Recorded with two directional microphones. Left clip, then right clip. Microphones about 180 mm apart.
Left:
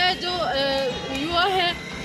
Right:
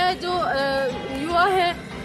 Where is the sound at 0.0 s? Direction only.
15° right (ahead or behind).